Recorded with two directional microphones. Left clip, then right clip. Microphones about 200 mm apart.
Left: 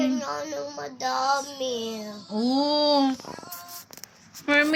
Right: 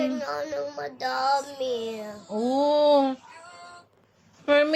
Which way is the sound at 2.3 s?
30° right (ahead or behind).